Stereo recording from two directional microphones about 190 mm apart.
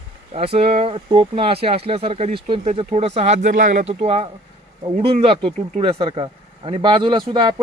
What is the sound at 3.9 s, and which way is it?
Speech, 30° right (ahead or behind).